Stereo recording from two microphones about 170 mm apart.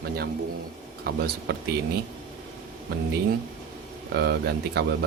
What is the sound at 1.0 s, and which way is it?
Speech, 70° right (ahead or behind).